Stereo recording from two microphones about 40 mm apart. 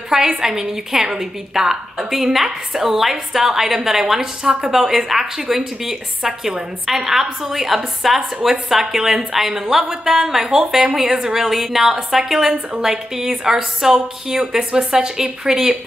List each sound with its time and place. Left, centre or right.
0.4 s a woman's voice: centre
6.9 s a woman's voice: centre